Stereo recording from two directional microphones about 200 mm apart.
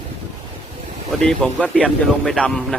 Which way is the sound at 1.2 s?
5° left (ahead or behind).